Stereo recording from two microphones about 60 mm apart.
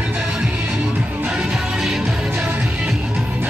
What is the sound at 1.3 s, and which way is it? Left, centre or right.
Music, centre.